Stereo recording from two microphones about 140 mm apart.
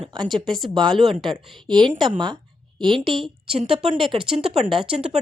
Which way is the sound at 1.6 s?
30° right (ahead or behind).